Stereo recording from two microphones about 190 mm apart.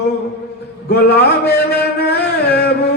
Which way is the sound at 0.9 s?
60° left (ahead or behind).